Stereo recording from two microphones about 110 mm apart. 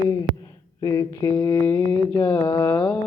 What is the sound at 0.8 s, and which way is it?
Mantra, 30° left (ahead or behind).